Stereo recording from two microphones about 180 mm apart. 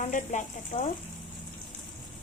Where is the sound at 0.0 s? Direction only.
45° left (ahead or behind).